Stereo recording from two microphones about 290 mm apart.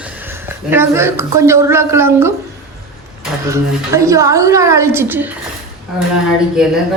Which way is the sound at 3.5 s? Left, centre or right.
Centre.